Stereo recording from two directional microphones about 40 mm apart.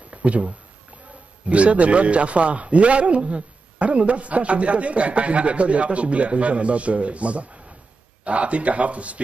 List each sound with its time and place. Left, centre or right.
0.1 s a man's voice: right